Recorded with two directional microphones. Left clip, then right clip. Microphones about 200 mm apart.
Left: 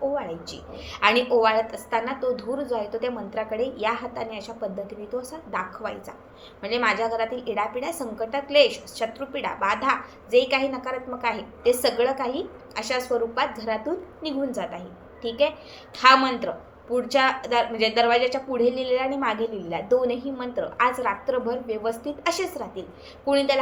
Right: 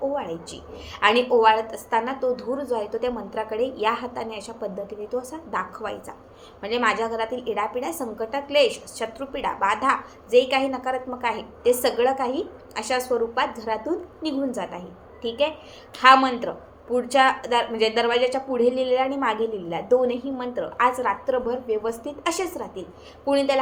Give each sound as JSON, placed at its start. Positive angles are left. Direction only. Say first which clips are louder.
{"t": 0.9, "sound": "speech", "louder": "right 1 dB", "side_deg": -15}